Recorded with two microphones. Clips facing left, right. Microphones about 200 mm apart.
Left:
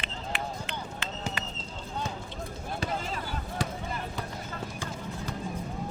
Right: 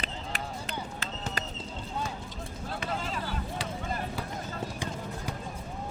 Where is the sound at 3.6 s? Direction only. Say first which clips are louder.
Left 4 dB; 45° left (ahead or behind).